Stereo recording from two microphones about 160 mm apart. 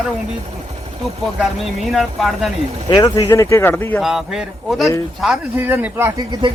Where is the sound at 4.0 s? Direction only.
Centre (ahead or behind).